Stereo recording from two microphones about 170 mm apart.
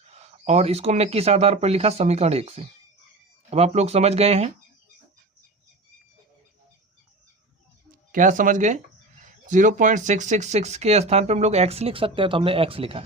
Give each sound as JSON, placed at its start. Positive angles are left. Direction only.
{"t": 0.1, "sound": "speech", "side_deg": -40}
{"t": 7.9, "sound": "speech", "side_deg": -50}